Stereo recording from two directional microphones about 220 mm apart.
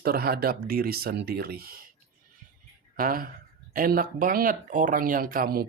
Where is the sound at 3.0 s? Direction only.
40° right (ahead or behind).